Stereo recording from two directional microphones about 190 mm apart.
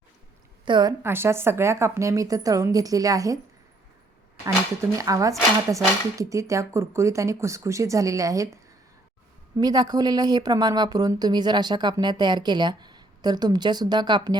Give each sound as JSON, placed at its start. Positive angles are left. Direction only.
{"t": 0.6, "sound": "a woman's voice", "side_deg": -25}
{"t": 1.0, "sound": "speech", "side_deg": -10}
{"t": 4.4, "sound": "speech", "side_deg": -15}
{"t": 9.6, "sound": "speech", "side_deg": -20}